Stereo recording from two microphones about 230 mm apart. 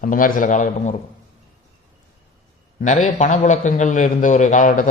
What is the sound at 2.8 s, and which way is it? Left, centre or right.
A man's voice, left.